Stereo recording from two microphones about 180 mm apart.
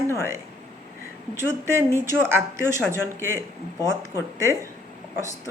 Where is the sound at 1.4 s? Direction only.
15° right (ahead or behind).